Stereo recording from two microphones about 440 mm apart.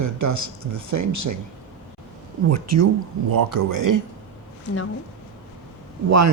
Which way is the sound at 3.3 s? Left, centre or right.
Right.